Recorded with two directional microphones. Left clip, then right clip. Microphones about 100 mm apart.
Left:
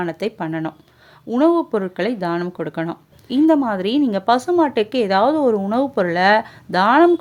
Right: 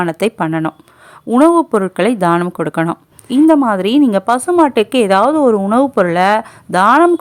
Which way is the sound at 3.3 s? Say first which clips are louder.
Right 6 dB; 35° right (ahead or behind).